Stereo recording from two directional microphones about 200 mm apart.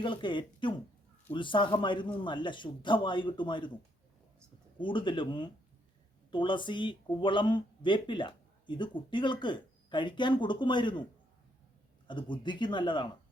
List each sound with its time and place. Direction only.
0.0 s speech: 25° left (ahead or behind)
4.8 s speech: 25° left (ahead or behind)
12.0 s speech: 25° left (ahead or behind)